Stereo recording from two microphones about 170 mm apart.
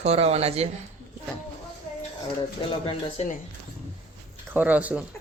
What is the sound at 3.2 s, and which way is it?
Speech, 40° left (ahead or behind).